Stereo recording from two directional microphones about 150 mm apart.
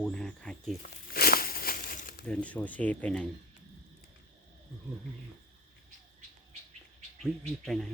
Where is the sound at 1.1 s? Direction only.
85° left; by 2.2 s 70° left (ahead or behind).